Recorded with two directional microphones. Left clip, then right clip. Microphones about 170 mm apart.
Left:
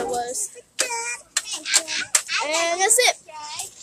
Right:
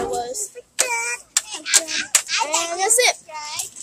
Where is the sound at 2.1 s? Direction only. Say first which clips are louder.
Right 2 dB; 35° right (ahead or behind).